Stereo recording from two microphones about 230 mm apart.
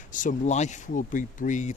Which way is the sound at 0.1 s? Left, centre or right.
Left.